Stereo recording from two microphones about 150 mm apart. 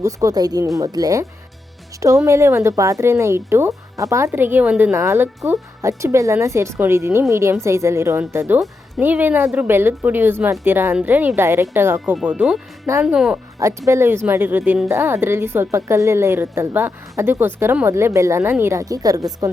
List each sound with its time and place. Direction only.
0.0 s speech: 20° right (ahead or behind); by 13.4 s 5° right (ahead or behind)
13.6 s speech: 20° right (ahead or behind)